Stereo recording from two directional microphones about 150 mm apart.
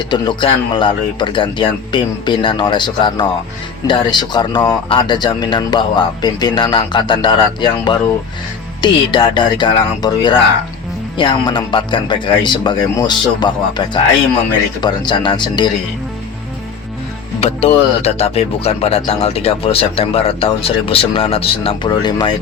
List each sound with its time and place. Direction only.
0.1 s speech: 30° left (ahead or behind)
17.4 s speech: 45° left (ahead or behind)